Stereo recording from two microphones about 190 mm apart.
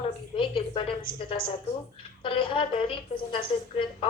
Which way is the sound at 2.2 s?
25° left (ahead or behind).